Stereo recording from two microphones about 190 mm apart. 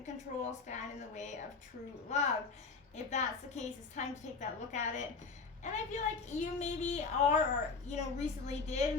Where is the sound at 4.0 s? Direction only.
40° left (ahead or behind).